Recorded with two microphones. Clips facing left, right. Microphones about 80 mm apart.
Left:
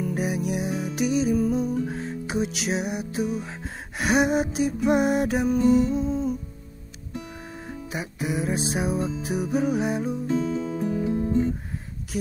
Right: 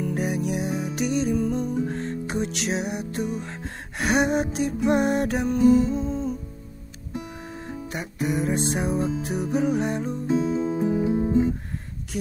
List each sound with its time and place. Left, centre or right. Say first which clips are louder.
0.0 s music: right 1 dB; centre
10.2 s music: right 6 dB; centre